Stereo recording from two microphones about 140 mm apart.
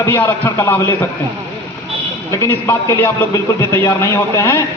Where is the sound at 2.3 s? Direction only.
20° left (ahead or behind).